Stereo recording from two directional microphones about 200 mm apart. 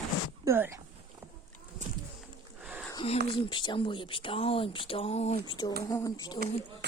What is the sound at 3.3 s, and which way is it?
Speech, 25° left (ahead or behind).